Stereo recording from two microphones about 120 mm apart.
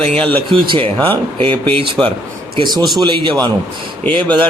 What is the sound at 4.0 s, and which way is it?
Speech, 10° left (ahead or behind).